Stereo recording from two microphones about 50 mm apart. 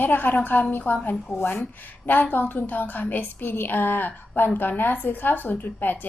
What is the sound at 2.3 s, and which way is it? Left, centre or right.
A woman's voice, left.